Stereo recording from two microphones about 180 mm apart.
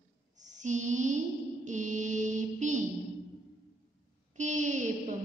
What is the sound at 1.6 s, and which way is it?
Mantra, 40° right (ahead or behind).